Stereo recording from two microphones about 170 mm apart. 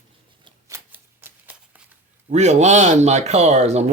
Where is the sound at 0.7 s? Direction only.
10° right (ahead or behind).